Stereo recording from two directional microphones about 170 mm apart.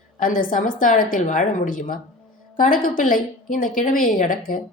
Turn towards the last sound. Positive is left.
turn(degrees=55)  # may be behind; listen again after turning